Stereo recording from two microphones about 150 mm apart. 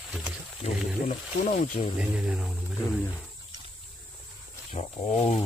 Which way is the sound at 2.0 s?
5° right (ahead or behind).